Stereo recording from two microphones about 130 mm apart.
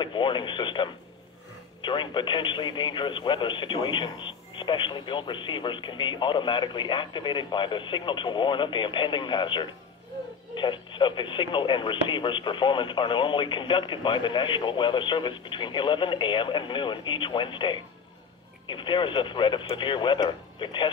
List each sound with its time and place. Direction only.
0.0 s speech: 40° left (ahead or behind)